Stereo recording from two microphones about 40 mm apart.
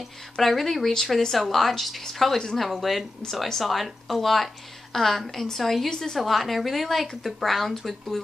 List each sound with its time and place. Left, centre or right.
0.0 s speech: centre
2.3 s a woman's voice: centre
2.6 s a woman's voice: centre
5.9 s a woman's voice: centre
6.1 s speech: centre